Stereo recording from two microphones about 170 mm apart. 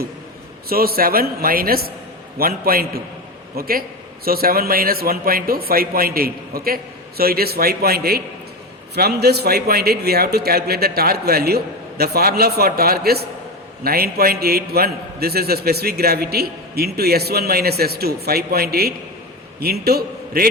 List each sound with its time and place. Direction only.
0.7 s a man's voice: 60° right (ahead or behind)